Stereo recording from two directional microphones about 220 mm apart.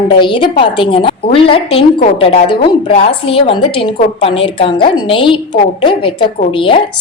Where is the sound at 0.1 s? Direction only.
20° left (ahead or behind).